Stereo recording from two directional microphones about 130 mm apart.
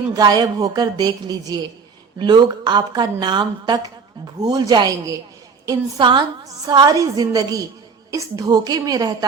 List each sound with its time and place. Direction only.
0.1 s a woman's voice: 30° right (ahead or behind)